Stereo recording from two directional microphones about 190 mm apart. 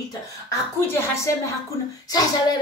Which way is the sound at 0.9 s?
15° left (ahead or behind).